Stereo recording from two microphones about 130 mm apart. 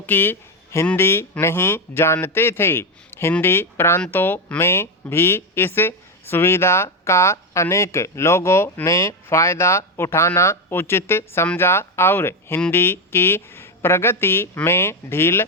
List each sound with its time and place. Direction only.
0.0 s speech: 15° left (ahead or behind)